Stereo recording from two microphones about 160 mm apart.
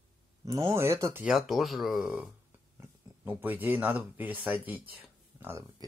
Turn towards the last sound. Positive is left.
turn(degrees=-15)  # may be behind; listen again after turning